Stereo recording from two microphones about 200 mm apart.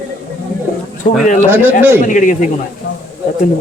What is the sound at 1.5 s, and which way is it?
Speech, 10° right (ahead or behind).